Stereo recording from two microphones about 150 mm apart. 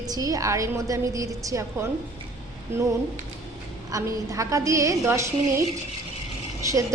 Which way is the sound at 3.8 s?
20° right (ahead or behind).